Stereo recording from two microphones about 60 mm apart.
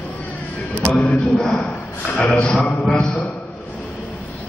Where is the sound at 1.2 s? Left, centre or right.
Centre.